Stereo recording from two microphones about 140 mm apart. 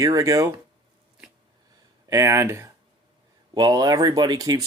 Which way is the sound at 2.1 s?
20° right (ahead or behind).